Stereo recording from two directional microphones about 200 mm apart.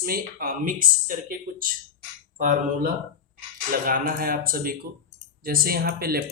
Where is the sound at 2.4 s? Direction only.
45° right (ahead or behind).